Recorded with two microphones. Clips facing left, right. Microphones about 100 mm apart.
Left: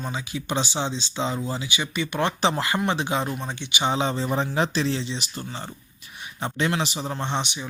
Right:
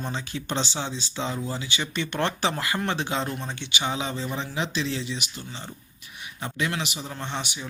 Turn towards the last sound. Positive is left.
turn(degrees=20)  # may be behind; listen again after turning